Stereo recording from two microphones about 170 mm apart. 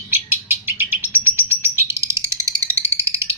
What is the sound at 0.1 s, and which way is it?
Bird, 10° right (ahead or behind).